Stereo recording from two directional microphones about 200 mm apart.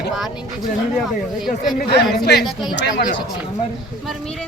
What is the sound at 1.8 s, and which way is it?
Speech, 55° left (ahead or behind).